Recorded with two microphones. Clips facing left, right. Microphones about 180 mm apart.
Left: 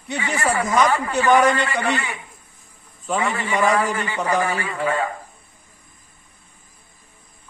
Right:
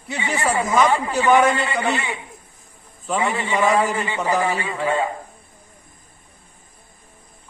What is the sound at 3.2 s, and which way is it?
A woman's voice, 25° right (ahead or behind).